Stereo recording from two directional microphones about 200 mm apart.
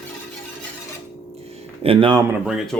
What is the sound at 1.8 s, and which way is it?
Speech, 25° right (ahead or behind).